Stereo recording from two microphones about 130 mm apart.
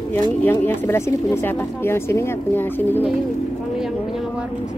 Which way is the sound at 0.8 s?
20° left (ahead or behind).